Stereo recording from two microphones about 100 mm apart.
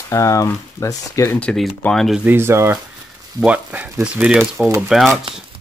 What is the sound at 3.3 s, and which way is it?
Speech, 15° right (ahead or behind).